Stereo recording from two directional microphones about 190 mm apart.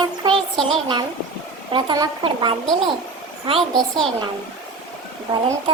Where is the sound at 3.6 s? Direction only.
Centre (ahead or behind).